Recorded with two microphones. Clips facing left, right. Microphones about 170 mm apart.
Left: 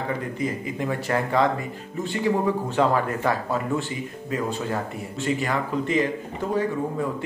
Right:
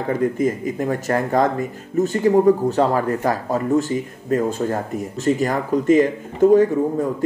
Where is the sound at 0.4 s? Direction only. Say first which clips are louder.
Right 6 dB; 45° right (ahead or behind).